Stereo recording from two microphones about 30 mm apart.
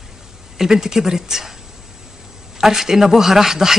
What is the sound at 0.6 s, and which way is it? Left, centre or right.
Speech, centre.